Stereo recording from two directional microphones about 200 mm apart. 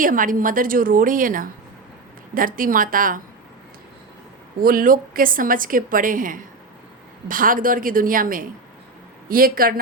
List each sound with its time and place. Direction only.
0.0 s a woman's voice: 45° right (ahead or behind)
4.6 s a woman's voice: 45° right (ahead or behind)